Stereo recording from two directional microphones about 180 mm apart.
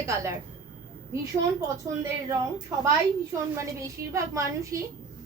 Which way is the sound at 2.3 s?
15° right (ahead or behind).